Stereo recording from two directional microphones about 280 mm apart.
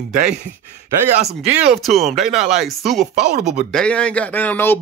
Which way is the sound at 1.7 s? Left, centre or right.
Centre.